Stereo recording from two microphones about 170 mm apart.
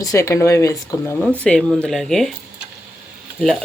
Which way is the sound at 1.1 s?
5° left (ahead or behind).